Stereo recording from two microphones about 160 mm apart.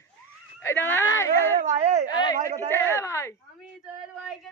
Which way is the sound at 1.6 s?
45° right (ahead or behind).